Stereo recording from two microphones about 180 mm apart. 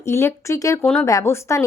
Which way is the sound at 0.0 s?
15° left (ahead or behind).